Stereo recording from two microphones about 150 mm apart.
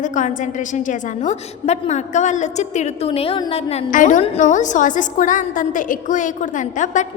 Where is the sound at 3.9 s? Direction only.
55° left (ahead or behind).